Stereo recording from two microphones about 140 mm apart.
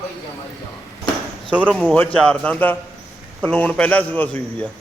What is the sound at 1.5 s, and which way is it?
Speech, 10° right (ahead or behind).